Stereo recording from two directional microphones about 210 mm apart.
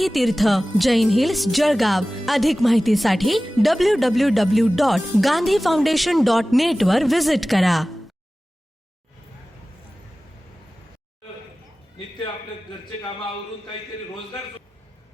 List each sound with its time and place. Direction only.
0.0 s speech: centre (ahead or behind)